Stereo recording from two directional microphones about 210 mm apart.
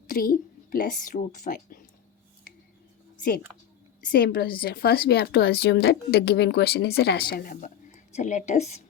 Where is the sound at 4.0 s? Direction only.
45° left (ahead or behind).